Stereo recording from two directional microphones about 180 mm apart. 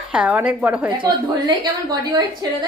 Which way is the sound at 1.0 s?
25° right (ahead or behind).